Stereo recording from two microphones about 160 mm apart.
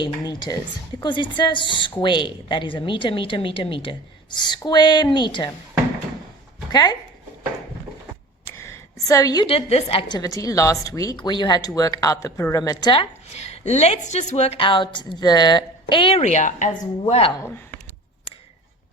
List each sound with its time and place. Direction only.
0.0 s a woman's voice: 25° left (ahead or behind)
6.7 s speech: 25° left (ahead or behind)
8.5 s a sound: 20° left (ahead or behind)
9.5 s a woman's voice: 40° left (ahead or behind)
13.2 s a woman's voice: 45° left (ahead or behind)
17.1 s a woman's voice: 35° left (ahead or behind)